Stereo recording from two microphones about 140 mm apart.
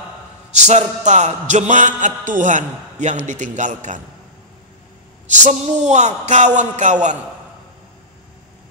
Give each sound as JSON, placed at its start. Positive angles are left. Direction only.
{"t": 0.7, "sound": "music", "side_deg": -55}
{"t": 5.3, "sound": "music", "side_deg": -55}